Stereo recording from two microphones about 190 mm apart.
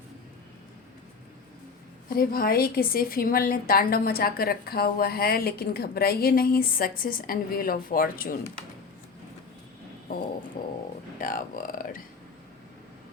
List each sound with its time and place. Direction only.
2.0 s a woman's voice: 50° left (ahead or behind)
10.6 s a woman's voice: 50° left (ahead or behind)